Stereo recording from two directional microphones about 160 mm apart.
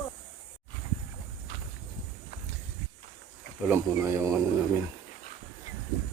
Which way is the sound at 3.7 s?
15° right (ahead or behind).